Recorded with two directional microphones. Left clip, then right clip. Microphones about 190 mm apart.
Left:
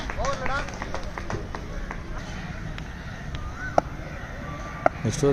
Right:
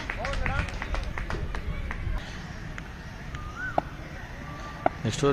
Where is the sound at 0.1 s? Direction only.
35° left (ahead or behind).